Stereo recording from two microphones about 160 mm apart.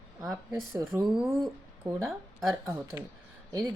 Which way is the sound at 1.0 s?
Centre (ahead or behind).